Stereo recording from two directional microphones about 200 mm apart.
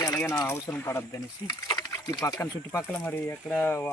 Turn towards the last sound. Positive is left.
turn(degrees=10)  # may be behind; listen again after turning